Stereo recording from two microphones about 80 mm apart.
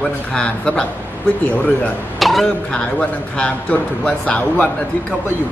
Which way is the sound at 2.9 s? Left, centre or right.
Centre.